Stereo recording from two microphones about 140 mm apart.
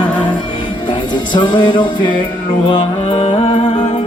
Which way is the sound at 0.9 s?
35° left (ahead or behind).